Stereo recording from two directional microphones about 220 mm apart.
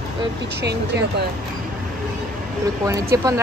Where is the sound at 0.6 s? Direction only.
50° right (ahead or behind).